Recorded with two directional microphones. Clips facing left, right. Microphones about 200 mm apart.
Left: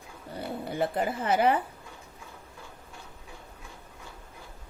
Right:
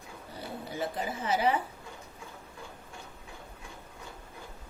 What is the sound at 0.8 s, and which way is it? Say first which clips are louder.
Speech: left 6 dB; 60° left (ahead or behind).